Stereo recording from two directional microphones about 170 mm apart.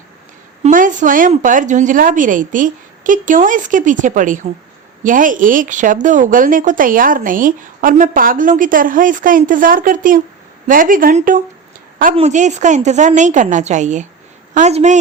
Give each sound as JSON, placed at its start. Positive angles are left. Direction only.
{"t": 0.6, "sound": "a woman's voice", "side_deg": -50}